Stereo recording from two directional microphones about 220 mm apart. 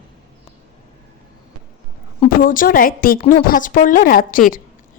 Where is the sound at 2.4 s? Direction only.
40° left (ahead or behind).